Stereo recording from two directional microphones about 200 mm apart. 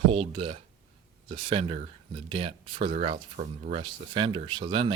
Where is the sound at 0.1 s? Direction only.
25° right (ahead or behind).